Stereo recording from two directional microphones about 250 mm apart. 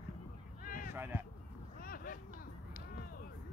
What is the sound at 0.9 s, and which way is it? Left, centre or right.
Speech, centre.